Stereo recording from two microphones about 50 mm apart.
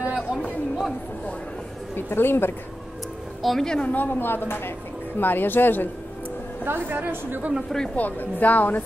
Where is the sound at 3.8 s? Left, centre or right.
Left.